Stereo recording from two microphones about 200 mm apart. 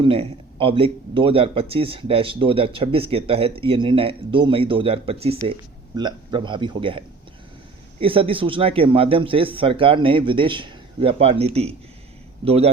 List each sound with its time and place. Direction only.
0.0 s a man's voice: 25° right (ahead or behind)